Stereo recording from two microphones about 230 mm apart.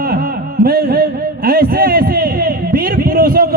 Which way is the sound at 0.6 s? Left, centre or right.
Right.